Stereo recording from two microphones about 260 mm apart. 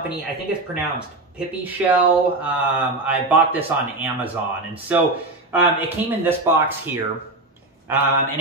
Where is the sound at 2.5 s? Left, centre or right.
Centre.